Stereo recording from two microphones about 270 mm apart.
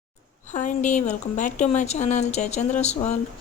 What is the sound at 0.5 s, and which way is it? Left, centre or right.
A woman's voice, left.